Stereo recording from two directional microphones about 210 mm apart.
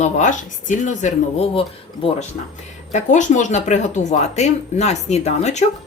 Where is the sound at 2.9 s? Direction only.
35° left (ahead or behind).